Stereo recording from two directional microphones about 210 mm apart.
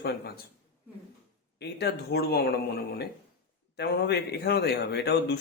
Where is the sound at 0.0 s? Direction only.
55° left (ahead or behind).